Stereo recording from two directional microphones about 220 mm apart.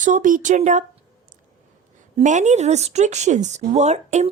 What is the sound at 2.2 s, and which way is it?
Speech, 30° right (ahead or behind).